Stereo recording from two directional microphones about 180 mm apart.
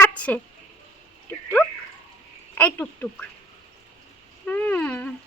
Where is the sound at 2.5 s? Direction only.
10° left (ahead or behind).